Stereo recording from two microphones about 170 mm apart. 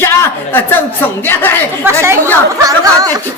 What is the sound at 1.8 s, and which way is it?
Speech, 15° right (ahead or behind).